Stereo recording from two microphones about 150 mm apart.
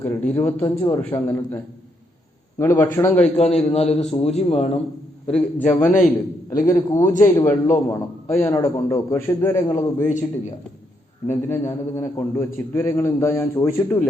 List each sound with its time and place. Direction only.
0.0 s a man's voice: 15° left (ahead or behind)
2.6 s a man's voice: 15° left (ahead or behind)
3.3 s a man's voice: 45° left (ahead or behind)
5.3 s a man's voice: 10° left (ahead or behind)
6.7 s a man's voice: 20° left (ahead or behind)
7.0 s a man's voice: 60° left (ahead or behind)
7.4 s a man's voice: 20° left (ahead or behind)
10.0 s a man's voice: 55° left (ahead or behind)
11.3 s a man's voice: 20° left (ahead or behind)